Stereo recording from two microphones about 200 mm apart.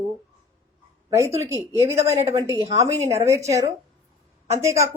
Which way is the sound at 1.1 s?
15° right (ahead or behind).